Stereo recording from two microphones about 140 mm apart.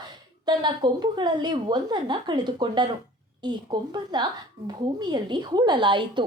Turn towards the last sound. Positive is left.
turn(degrees=-35)  # may be behind; listen again after turning